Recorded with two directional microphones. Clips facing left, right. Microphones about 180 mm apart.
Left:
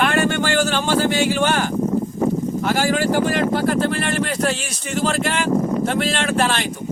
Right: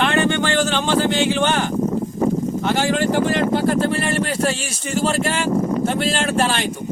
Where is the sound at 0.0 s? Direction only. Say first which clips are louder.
Even; 5° left (ahead or behind).